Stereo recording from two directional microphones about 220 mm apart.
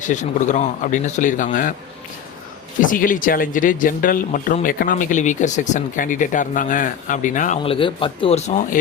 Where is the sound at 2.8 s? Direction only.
40° left (ahead or behind).